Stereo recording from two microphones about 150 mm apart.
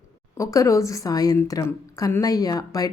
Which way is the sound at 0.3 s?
20° left (ahead or behind).